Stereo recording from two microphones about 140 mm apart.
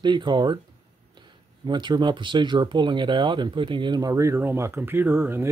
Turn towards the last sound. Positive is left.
turn(degrees=-15)  # may be behind; listen again after turning